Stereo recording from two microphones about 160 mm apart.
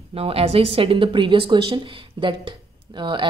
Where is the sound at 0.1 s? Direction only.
40° right (ahead or behind).